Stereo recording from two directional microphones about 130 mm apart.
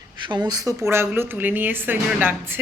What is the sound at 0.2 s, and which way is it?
A woman's voice, 35° right (ahead or behind).